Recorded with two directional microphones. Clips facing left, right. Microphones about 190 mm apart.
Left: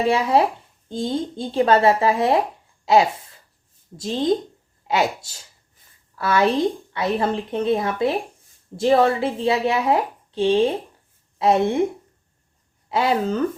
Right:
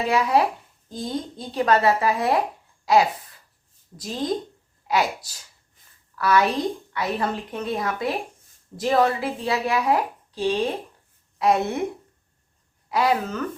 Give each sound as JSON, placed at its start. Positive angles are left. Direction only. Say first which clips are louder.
{"t": 0.0, "sound": "a woman's voice", "louder": "left 2 dB", "side_deg": 30}
{"t": 12.9, "sound": "speech", "louder": "left 2 dB", "side_deg": 25}